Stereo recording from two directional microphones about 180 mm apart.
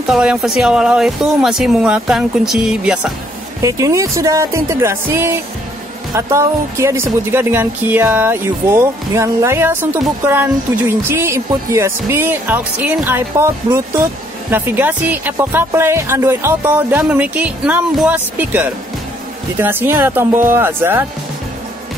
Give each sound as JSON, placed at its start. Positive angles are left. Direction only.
{"t": 0.0, "sound": "speech", "side_deg": -5}
{"t": 3.6, "sound": "speech", "side_deg": -15}